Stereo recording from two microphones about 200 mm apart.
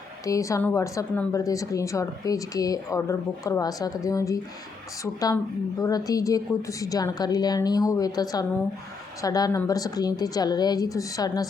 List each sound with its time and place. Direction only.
0.3 s a woman's voice: 15° left (ahead or behind)